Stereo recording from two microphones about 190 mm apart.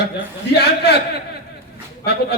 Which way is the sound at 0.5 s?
60° left (ahead or behind).